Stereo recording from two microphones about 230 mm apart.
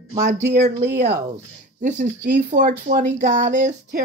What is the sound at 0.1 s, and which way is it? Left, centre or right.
Speech, right.